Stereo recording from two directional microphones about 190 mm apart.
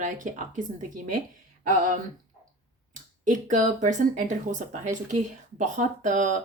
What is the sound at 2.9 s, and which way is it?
Speech, 40° right (ahead or behind).